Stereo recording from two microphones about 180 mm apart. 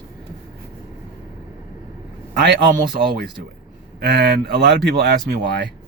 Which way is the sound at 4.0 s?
65° right (ahead or behind).